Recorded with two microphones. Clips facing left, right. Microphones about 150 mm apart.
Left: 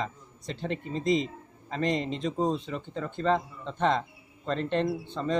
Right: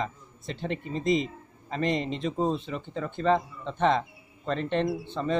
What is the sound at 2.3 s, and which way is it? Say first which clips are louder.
Speech: even; 15° left (ahead or behind).